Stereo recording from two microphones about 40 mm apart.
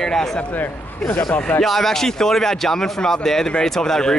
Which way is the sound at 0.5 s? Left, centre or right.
Left.